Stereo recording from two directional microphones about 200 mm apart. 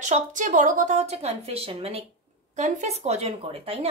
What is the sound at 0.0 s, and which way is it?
Speech, 40° right (ahead or behind).